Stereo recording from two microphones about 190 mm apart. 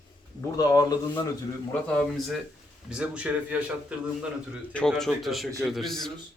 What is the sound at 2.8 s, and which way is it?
Speech, 5° right (ahead or behind).